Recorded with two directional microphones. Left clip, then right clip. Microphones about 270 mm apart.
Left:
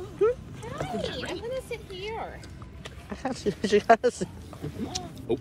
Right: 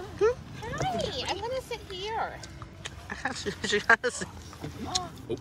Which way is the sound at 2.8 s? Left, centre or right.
Centre.